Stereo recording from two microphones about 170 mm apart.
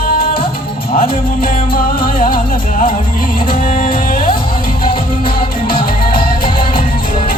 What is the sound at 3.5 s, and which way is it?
Music, 55° left (ahead or behind).